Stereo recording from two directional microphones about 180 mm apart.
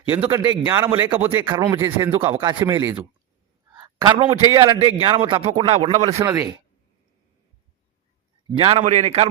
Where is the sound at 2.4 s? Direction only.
25° right (ahead or behind).